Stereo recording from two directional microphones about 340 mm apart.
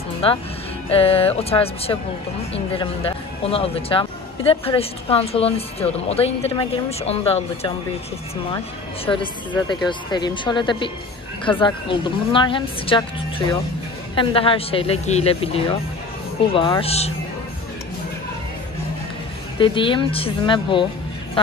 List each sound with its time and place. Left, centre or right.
0.2 s speech: centre
9.0 s speech: centre
14.1 s speech: centre
19.6 s speech: centre